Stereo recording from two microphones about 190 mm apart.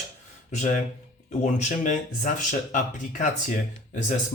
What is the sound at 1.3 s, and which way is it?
Speech, 40° left (ahead or behind).